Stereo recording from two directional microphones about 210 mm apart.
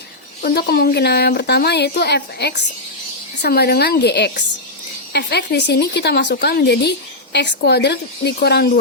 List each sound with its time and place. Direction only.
0.4 s speech: 45° left (ahead or behind)